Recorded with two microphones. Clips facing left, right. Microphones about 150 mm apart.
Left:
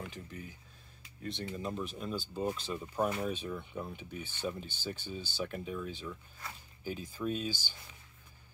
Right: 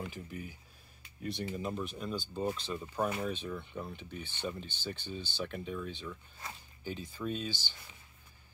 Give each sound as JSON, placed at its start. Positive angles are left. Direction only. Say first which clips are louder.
{"t": 0.0, "sound": "speech", "louder": "right 2 dB", "side_deg": -5}